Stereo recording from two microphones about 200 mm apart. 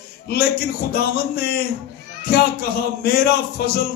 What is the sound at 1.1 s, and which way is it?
A man's voice, 50° left (ahead or behind).